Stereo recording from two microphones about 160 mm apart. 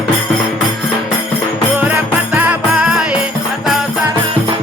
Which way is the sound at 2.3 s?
10° right (ahead or behind).